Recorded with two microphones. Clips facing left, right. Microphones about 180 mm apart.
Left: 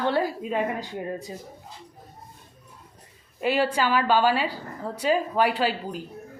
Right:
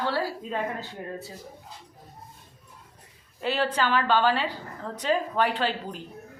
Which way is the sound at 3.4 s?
10° left (ahead or behind).